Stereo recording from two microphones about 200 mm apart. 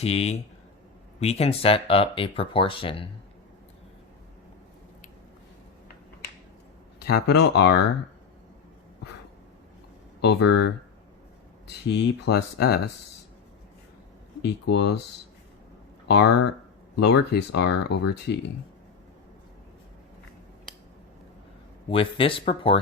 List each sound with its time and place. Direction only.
0.0 s speech: 30° left (ahead or behind)
7.0 s speech: 55° left (ahead or behind)
10.2 s speech: 60° left (ahead or behind)
11.7 s speech: 55° left (ahead or behind)
14.4 s speech: 60° left (ahead or behind)
16.0 s speech: 55° left (ahead or behind)
21.8 s speech: 25° left (ahead or behind)